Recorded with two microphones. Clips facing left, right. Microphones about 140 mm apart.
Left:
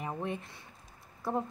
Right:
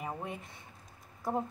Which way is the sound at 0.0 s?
10° right (ahead or behind).